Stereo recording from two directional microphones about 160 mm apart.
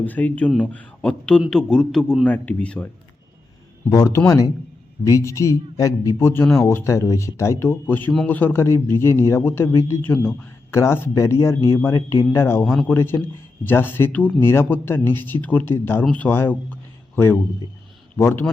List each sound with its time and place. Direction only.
0.0 s speech: 10° left (ahead or behind)
3.8 s speech: 20° left (ahead or behind)
8.1 s a man's voice: centre (ahead or behind)
8.4 s speech: 15° left (ahead or behind)
18.2 s speech: 15° left (ahead or behind)